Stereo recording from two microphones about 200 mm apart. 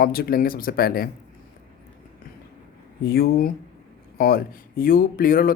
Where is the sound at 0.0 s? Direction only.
50° left (ahead or behind).